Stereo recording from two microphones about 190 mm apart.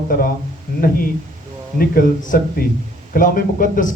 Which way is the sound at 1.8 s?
50° left (ahead or behind).